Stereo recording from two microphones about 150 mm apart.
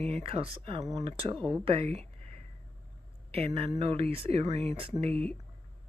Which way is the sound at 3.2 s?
40° right (ahead or behind).